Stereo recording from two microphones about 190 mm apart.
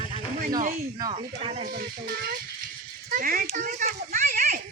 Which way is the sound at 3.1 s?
45° right (ahead or behind).